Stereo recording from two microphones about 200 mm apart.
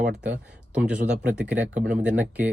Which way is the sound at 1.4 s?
5° right (ahead or behind).